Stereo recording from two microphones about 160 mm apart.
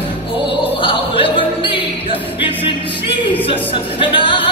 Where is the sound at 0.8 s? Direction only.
35° left (ahead or behind).